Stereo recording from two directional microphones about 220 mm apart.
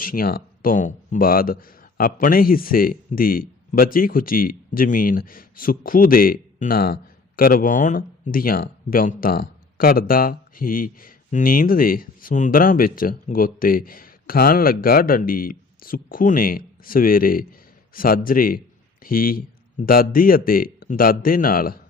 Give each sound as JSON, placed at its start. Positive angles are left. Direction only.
{"t": 0.0, "sound": "speech", "side_deg": 40}